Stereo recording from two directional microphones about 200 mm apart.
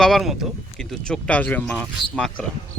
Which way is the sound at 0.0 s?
Centre (ahead or behind).